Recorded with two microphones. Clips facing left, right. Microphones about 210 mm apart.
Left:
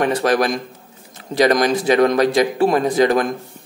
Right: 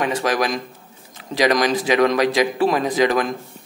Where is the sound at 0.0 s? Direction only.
55° left (ahead or behind).